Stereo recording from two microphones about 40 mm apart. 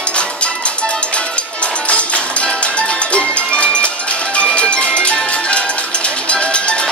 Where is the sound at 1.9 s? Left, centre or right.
Left.